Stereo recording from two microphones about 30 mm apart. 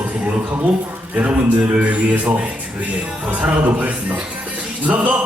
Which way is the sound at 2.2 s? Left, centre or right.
Right.